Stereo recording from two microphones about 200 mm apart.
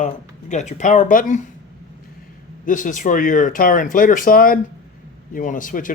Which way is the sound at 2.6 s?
40° left (ahead or behind).